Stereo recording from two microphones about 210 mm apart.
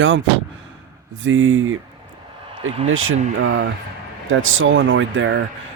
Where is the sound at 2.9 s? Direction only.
70° right (ahead or behind).